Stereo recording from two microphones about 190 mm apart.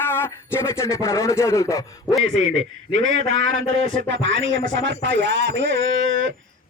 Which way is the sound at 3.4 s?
90° right.